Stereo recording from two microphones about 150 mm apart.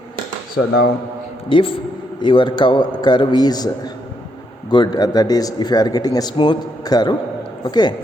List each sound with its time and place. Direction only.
1.5 s a man's voice: 35° left (ahead or behind)